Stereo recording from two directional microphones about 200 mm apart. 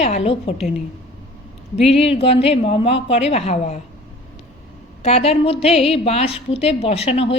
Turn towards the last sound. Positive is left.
turn(degrees=30)  # may be behind; listen again after turning